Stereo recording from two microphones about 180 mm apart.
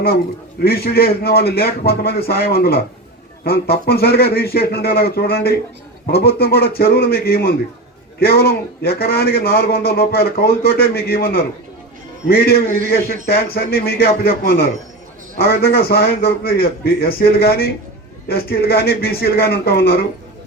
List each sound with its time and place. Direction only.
0.6 s a man's voice: 60° left (ahead or behind)